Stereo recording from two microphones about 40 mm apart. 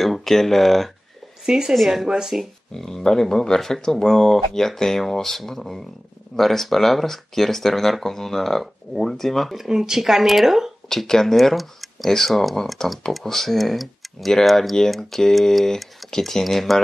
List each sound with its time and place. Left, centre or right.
0.0 s speech: centre
1.4 s a woman's voice: centre
1.8 s speech: centre
2.0 s speech: centre
2.7 s speech: centre
9.7 s speech: centre
10.9 s speech: centre